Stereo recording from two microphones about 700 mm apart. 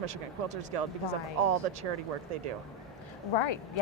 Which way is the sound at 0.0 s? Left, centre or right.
Right.